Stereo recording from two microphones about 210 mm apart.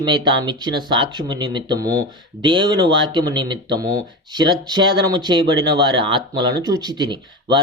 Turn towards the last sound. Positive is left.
turn(degrees=-20)  # may be behind; listen again after turning